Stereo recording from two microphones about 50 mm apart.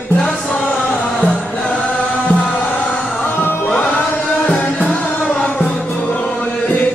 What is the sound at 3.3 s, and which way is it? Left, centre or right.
Music, left.